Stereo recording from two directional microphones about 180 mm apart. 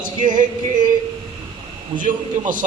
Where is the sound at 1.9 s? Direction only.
30° right (ahead or behind).